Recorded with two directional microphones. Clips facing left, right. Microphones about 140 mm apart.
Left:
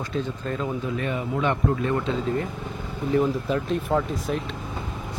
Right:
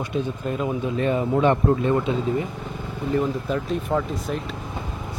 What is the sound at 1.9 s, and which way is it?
Speech, 15° right (ahead or behind).